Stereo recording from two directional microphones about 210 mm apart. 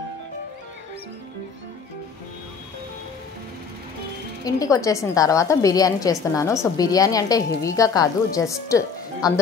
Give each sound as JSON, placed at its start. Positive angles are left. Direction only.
{"t": 4.5, "sound": "a woman's voice", "side_deg": 15}